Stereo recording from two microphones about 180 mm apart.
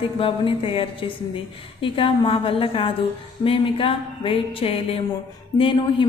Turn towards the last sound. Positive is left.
turn(degrees=30)  # may be behind; listen again after turning